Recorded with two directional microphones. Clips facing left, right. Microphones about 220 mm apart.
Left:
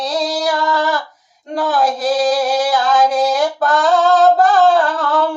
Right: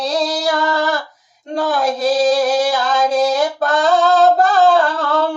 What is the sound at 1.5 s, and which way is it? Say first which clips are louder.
Female singing: left 1 dB; 25° right (ahead or behind).